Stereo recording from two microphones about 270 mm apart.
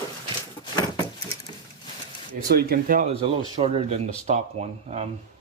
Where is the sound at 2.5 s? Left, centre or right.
Right.